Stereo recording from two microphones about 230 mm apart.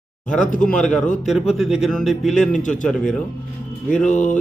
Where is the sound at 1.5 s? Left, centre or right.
Centre.